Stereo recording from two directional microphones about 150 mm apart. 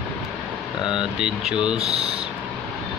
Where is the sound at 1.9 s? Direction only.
40° right (ahead or behind).